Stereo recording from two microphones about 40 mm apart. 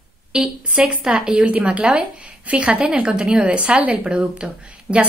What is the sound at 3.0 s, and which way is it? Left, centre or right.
A woman's voice, right.